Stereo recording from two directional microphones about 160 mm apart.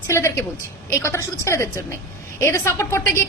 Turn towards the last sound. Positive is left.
turn(degrees=15)  # may be behind; listen again after turning